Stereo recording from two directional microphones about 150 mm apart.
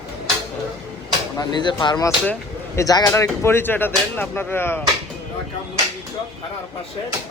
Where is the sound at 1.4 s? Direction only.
30° left (ahead or behind).